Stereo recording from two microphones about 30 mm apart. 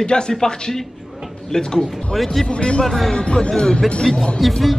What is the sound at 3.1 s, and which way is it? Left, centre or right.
Speech, left.